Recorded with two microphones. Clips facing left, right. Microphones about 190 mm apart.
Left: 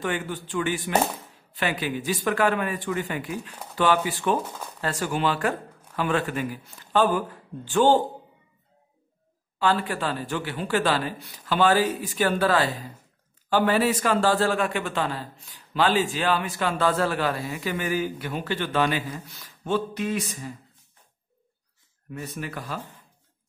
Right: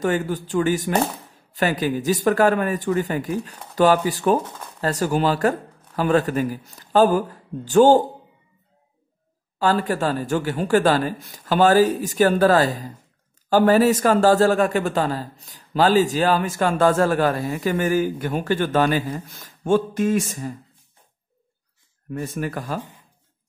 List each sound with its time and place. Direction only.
0.0 s speech: 40° right (ahead or behind)
9.6 s a man's voice: 40° right (ahead or behind)
22.1 s a man's voice: 50° right (ahead or behind)
22.8 s speech: 10° right (ahead or behind)